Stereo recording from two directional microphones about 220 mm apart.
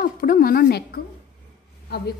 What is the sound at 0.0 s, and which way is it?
A woman's voice, 40° left (ahead or behind).